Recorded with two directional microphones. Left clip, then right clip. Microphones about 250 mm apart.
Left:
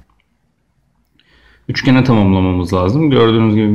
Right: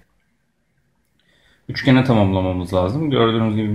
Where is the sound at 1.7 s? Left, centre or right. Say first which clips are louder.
Left 3 dB; centre.